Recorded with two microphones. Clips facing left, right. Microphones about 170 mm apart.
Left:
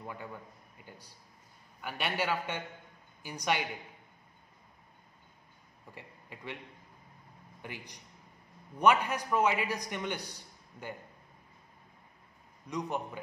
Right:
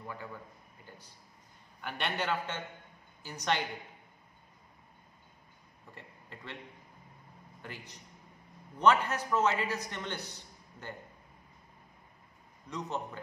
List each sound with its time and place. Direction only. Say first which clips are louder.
0.0 s a man's voice: left 1 dB; 15° left (ahead or behind)
5.9 s a man's voice: left 1 dB; 10° left (ahead or behind)
7.6 s a man's voice: left 2 dB; 15° left (ahead or behind)
12.6 s a man's voice: left 2 dB; 10° left (ahead or behind)